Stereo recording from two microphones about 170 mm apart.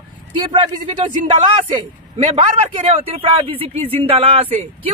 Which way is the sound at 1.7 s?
35° right (ahead or behind).